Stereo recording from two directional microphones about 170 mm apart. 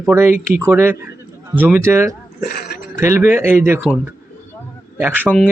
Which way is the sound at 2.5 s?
65° left (ahead or behind).